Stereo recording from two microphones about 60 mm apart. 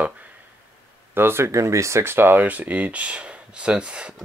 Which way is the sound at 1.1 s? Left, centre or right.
Right.